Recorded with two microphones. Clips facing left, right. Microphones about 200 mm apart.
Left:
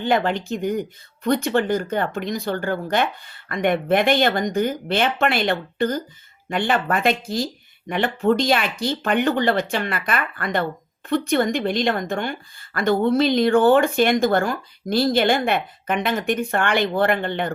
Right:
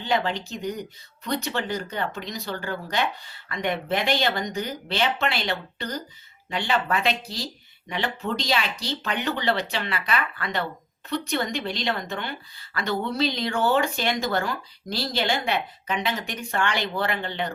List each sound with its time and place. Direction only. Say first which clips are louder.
0.0 s a woman's voice: left 5 dB; 55° left (ahead or behind)